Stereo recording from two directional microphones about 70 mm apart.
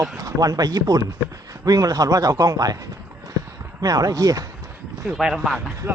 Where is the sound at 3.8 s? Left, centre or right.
Right.